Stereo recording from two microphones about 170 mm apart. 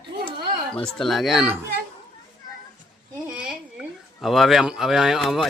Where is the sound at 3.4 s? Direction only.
Centre (ahead or behind).